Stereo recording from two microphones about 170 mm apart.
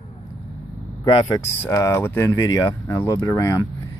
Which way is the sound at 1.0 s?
25° left (ahead or behind).